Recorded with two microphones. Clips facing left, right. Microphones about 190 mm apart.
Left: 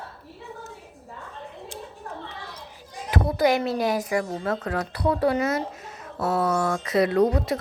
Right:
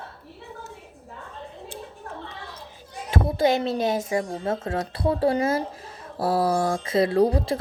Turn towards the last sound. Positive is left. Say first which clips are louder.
# even
turn(degrees=-30)  # may be behind; listen again after turning